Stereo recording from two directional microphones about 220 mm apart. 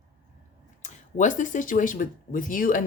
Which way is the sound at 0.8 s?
35° left (ahead or behind).